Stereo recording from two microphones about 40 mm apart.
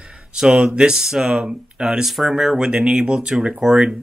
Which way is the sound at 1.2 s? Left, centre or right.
Right.